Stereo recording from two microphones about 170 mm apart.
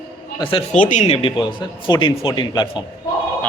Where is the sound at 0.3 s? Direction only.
30° left (ahead or behind).